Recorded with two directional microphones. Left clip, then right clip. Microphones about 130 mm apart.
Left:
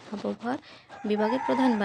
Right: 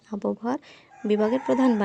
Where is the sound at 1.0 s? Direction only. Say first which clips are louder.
Right 3 dB; 30° right (ahead or behind).